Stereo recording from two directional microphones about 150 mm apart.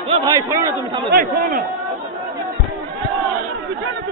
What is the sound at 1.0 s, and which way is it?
Speech, 75° right (ahead or behind).